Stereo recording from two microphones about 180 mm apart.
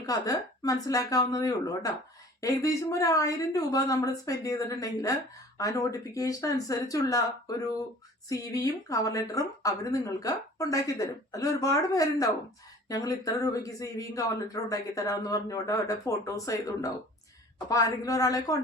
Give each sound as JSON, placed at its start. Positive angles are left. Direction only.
{"t": 0.0, "sound": "speech", "side_deg": 20}